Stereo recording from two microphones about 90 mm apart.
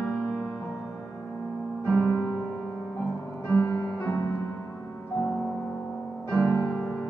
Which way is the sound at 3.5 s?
30° left (ahead or behind).